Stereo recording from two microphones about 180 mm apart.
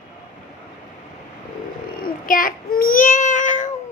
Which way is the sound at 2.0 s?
50° left (ahead or behind).